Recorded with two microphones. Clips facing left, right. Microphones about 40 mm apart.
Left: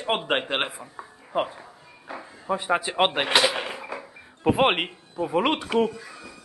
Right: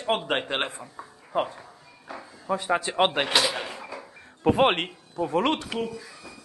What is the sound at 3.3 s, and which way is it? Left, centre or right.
Drawer open or close, centre.